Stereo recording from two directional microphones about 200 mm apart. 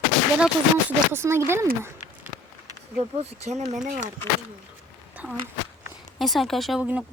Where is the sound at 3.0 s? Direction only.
30° right (ahead or behind).